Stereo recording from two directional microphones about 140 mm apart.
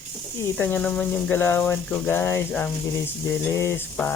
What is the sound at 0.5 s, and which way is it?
Speech, 10° left (ahead or behind).